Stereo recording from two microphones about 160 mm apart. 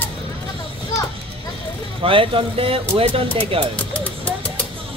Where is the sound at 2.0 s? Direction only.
35° right (ahead or behind).